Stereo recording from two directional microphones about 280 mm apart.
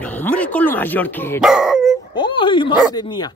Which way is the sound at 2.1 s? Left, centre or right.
Centre.